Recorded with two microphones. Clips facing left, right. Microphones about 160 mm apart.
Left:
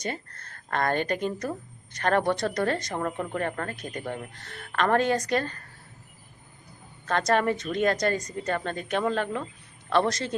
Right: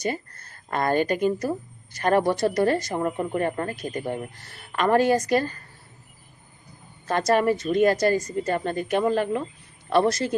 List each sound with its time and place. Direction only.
0.0 s speech: 10° right (ahead or behind)
4.4 s speech: 10° right (ahead or behind)
7.1 s speech: 10° right (ahead or behind)